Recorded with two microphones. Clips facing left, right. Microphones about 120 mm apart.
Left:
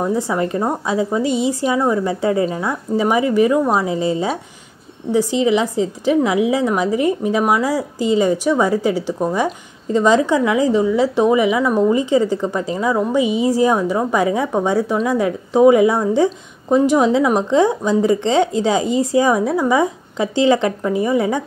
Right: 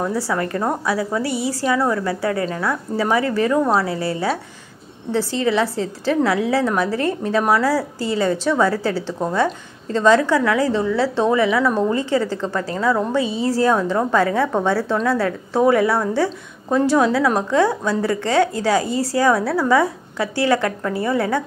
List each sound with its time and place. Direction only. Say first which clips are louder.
0.0 s a woman's voice: left 3 dB; 20° left (ahead or behind)